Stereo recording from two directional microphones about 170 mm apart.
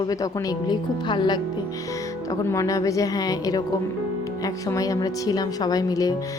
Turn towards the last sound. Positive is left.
turn(degrees=20)  # may be behind; listen again after turning